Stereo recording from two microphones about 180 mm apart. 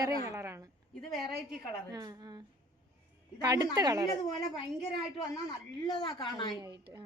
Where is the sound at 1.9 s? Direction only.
20° right (ahead or behind).